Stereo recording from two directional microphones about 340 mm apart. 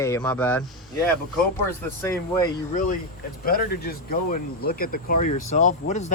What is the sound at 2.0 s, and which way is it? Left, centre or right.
Speech, centre.